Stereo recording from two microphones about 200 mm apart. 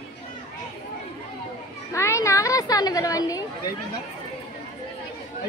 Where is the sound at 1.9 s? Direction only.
15° left (ahead or behind).